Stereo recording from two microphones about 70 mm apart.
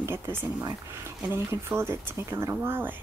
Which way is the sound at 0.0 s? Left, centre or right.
Right.